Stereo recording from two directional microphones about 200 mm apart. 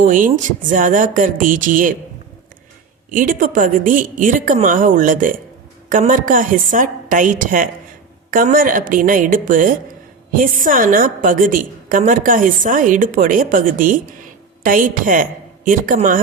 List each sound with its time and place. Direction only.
0.0 s a woman's voice: 40° right (ahead or behind)
3.1 s a woman's voice: 40° right (ahead or behind)